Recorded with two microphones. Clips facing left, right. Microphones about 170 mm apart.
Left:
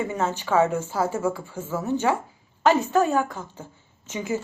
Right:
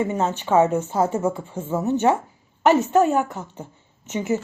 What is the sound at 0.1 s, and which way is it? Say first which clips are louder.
Speech: right 3 dB; 20° right (ahead or behind).